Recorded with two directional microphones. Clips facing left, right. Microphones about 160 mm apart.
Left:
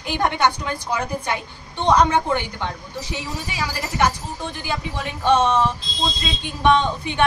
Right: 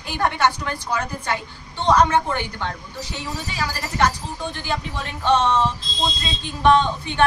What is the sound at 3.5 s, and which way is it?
Speech, 10° left (ahead or behind).